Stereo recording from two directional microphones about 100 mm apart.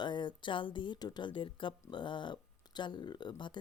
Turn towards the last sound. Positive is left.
turn(degrees=50)  # may be behind; listen again after turning